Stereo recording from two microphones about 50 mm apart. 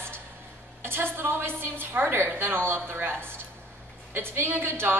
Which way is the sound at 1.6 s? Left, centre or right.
Right.